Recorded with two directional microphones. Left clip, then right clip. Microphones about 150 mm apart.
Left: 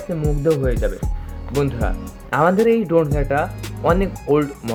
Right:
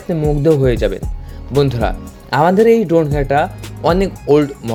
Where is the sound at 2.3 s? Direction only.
25° right (ahead or behind).